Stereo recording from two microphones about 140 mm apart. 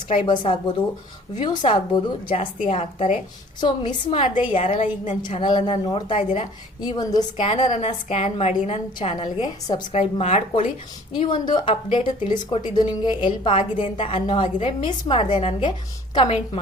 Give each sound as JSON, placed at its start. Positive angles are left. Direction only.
{"t": 0.3, "sound": "speech", "side_deg": 35}
{"t": 2.6, "sound": "a woman's voice", "side_deg": 50}
{"t": 3.6, "sound": "a woman's voice", "side_deg": 35}
{"t": 6.8, "sound": "a woman's voice", "side_deg": 30}
{"t": 7.3, "sound": "a woman's voice", "side_deg": 40}
{"t": 9.0, "sound": "speech", "side_deg": 35}
{"t": 9.9, "sound": "a woman's voice", "side_deg": 50}
{"t": 11.1, "sound": "speech", "side_deg": 35}